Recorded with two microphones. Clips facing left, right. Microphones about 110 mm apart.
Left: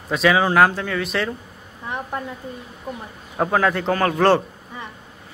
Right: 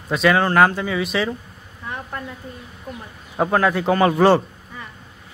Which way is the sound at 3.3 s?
Centre (ahead or behind).